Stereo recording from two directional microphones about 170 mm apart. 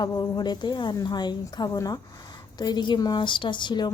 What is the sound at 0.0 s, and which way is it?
A woman's voice, 25° left (ahead or behind).